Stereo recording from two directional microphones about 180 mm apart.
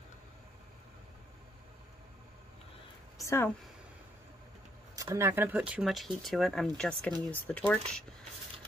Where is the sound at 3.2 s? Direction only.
15° left (ahead or behind).